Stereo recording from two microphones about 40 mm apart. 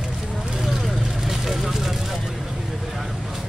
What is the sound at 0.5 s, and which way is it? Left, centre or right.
Vehicle, centre.